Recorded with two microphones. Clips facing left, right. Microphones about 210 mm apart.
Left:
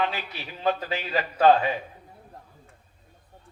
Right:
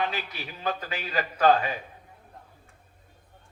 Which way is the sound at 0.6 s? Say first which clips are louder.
Left 5 dB; 30° left (ahead or behind).